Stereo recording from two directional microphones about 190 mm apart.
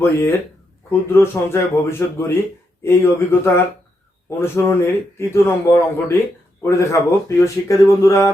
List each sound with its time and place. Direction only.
0.0 s a man's voice: 15° left (ahead or behind)